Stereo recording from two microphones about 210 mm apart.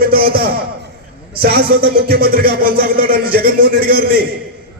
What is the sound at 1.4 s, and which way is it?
Speech, 45° right (ahead or behind).